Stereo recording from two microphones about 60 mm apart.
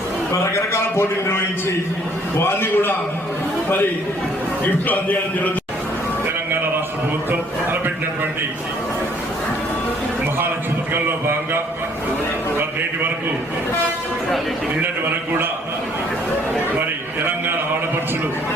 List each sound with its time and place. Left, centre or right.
0.4 s a man's voice: left
2.4 s a man's voice: left
4.6 s a man's voice: left
10.9 s speech: right